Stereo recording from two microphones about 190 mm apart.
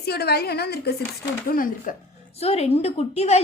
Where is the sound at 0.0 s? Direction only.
55° left (ahead or behind).